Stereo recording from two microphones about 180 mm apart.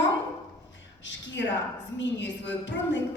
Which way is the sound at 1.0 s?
85° left.